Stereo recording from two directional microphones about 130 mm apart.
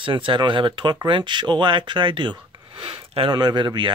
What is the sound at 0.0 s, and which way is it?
Speech, 40° right (ahead or behind).